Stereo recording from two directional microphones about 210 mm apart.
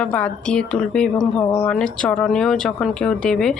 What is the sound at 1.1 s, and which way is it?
Speech, 15° left (ahead or behind).